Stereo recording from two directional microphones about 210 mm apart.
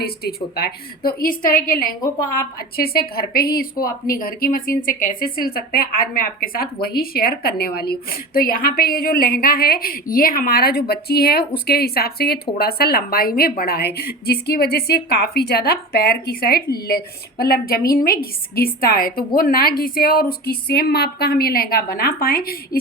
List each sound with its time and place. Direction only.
0.0 s a woman's voice: 50° left (ahead or behind)